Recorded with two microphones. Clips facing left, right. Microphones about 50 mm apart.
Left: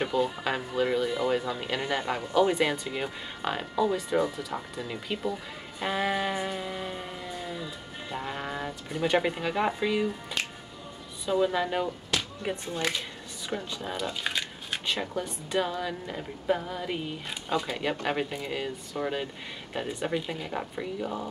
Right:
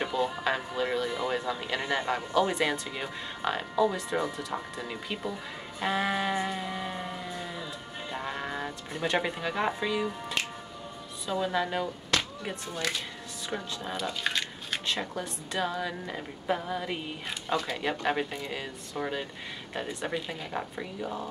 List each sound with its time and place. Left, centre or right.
0.0 s speech: centre
0.9 s a sound: centre
1.6 s speech: centre
5.8 s a sound: centre
8.1 s music: centre
9.0 s speech: centre
11.4 s speech: centre
12.1 s music: right
12.6 s speech: left
13.5 s speech: centre